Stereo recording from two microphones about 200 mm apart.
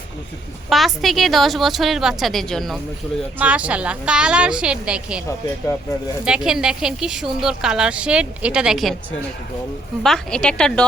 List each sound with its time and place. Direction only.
0.7 s a woman's voice: centre (ahead or behind)
6.2 s a woman's voice: 5° right (ahead or behind)
10.0 s a woman's voice: 5° left (ahead or behind)